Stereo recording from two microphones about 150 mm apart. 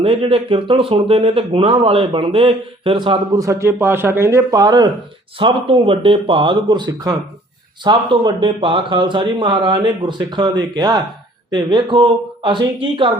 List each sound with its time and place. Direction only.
0.0 s speech: 40° right (ahead or behind)
3.3 s a man's voice: 20° right (ahead or behind)
5.4 s speech: 40° right (ahead or behind)